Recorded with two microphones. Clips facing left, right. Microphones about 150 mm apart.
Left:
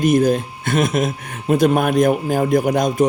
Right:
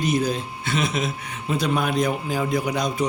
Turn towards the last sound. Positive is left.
turn(degrees=50)  # may be behind; listen again after turning